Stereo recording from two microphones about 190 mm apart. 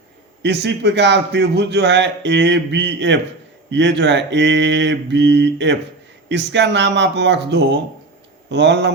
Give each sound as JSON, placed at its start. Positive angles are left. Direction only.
{"t": 0.4, "sound": "a man's voice", "side_deg": -65}